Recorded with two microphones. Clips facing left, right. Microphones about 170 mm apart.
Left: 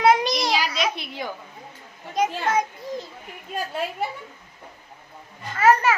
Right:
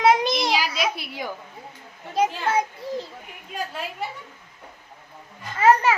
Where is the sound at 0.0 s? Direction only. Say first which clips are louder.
Even; centre (ahead or behind).